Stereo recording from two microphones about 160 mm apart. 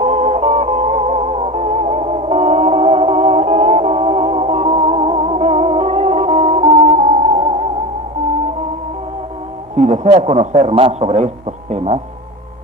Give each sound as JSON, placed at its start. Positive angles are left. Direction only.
{"t": 0.0, "sound": "music", "side_deg": -45}
{"t": 9.7, "sound": "a sound", "side_deg": -45}
{"t": 10.2, "sound": "a man's voice", "side_deg": -45}